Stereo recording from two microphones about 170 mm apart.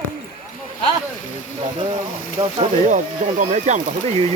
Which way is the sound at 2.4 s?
35° right (ahead or behind).